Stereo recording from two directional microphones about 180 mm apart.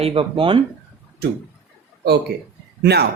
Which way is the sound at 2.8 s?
65° right (ahead or behind).